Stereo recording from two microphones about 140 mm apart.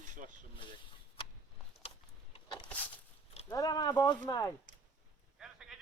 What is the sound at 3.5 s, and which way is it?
Speech, 25° left (ahead or behind).